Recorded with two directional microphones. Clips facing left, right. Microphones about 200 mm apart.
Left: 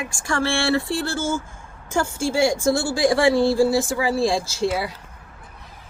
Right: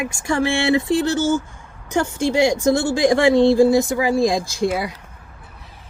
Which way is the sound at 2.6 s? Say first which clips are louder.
Right 3 dB; 20° right (ahead or behind).